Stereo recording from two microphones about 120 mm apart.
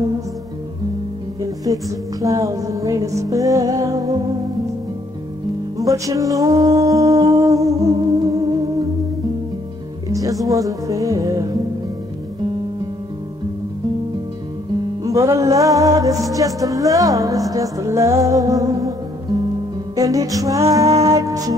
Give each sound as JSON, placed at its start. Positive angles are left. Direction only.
{"t": 1.4, "sound": "music", "side_deg": -30}
{"t": 5.8, "sound": "music", "side_deg": -30}
{"t": 10.0, "sound": "music", "side_deg": -30}
{"t": 15.0, "sound": "music", "side_deg": -25}